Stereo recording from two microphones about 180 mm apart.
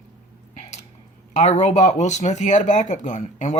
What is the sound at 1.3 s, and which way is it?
Speech, 40° left (ahead or behind).